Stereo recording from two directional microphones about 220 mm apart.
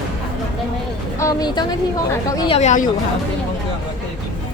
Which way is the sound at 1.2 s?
15° left (ahead or behind).